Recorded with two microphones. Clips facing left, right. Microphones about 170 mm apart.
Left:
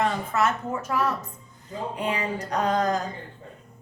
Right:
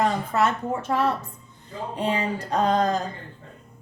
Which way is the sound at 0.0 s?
35° right (ahead or behind).